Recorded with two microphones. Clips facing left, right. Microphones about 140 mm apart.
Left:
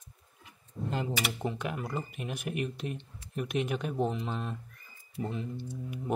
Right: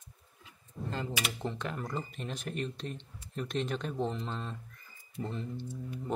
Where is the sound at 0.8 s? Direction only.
15° left (ahead or behind).